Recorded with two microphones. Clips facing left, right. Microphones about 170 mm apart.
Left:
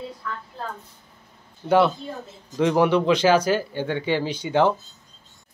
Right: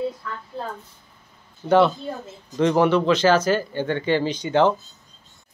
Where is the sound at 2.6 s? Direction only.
10° left (ahead or behind).